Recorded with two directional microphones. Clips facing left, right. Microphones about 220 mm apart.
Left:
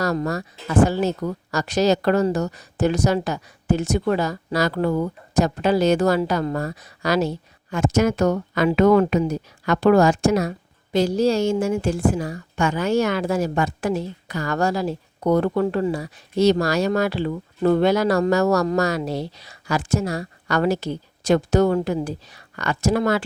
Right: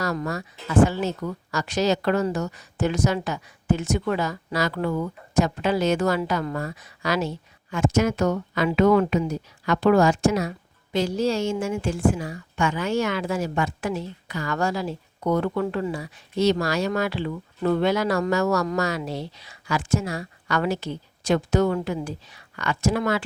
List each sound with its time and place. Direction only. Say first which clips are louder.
0.0 s a woman's voice: left 4 dB; 40° left (ahead or behind)